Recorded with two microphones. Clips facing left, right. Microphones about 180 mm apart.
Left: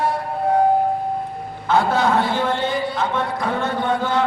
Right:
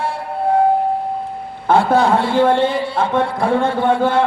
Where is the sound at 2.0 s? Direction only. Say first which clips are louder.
Right 5 dB; 30° right (ahead or behind).